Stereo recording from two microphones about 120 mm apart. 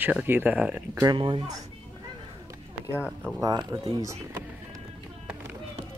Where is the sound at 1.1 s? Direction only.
45° right (ahead or behind).